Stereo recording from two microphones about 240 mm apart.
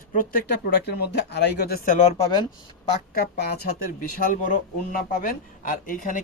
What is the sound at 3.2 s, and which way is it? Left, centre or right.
Speech, left.